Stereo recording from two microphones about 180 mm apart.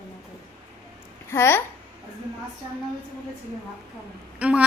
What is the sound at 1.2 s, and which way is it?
Speech, 15° left (ahead or behind).